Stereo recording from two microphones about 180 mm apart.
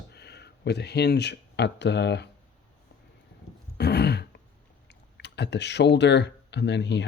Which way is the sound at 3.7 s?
65° left (ahead or behind).